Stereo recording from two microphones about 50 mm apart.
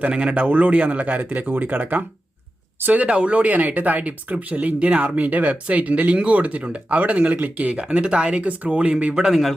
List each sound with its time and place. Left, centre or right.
0.1 s speech: right
0.4 s speech: right
0.7 s speech: right
7.7 s speech: right
9.1 s a man's voice: centre